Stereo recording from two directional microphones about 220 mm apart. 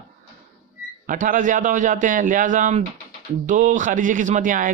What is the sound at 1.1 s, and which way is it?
A man's voice, 35° right (ahead or behind).